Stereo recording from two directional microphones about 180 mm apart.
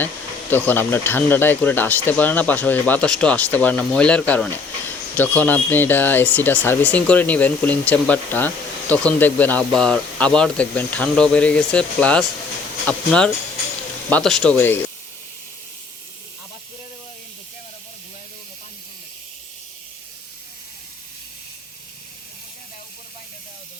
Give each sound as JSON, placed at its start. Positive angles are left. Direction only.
{"t": 0.5, "sound": "speech", "side_deg": 10}